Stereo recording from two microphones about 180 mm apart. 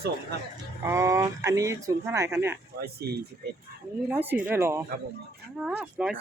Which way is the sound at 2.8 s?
60° right (ahead or behind).